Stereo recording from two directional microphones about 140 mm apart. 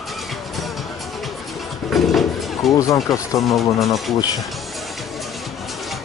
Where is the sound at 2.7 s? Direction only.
25° left (ahead or behind).